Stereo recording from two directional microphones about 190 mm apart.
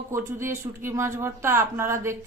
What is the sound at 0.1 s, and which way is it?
Speech, 15° right (ahead or behind).